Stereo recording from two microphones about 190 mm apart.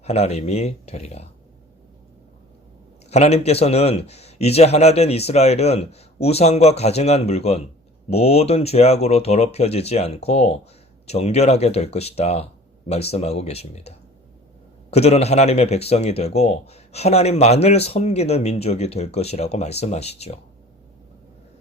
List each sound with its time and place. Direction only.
0.0 s speech: 35° left (ahead or behind)
3.1 s speech: 35° left (ahead or behind)